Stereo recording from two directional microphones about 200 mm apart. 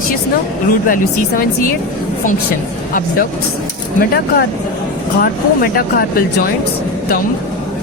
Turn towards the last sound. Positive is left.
turn(degrees=45)  # may be behind; listen again after turning